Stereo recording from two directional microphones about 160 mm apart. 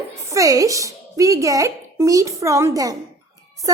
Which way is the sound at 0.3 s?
20° right (ahead or behind).